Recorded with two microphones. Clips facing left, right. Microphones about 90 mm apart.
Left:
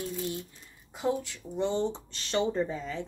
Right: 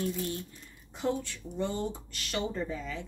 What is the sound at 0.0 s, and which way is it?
Speech, 15° left (ahead or behind).